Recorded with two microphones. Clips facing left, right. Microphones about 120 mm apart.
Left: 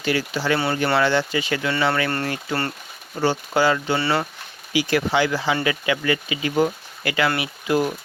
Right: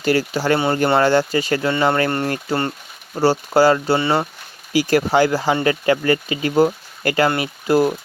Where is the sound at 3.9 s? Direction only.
20° right (ahead or behind).